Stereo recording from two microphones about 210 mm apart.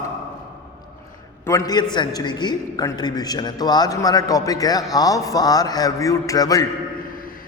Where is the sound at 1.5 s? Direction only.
15° left (ahead or behind).